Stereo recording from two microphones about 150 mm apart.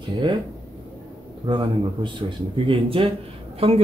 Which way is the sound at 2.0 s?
30° right (ahead or behind).